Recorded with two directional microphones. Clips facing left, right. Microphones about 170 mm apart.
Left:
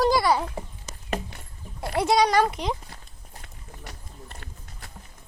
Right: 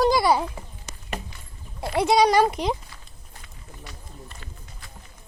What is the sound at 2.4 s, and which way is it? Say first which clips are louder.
Speech: right 4 dB; 10° right (ahead or behind).